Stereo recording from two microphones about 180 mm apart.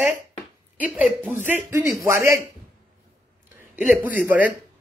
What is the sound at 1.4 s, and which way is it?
Speech, 15° right (ahead or behind).